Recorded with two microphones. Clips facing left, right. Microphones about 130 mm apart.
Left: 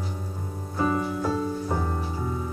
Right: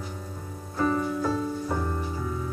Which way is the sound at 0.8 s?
15° left (ahead or behind).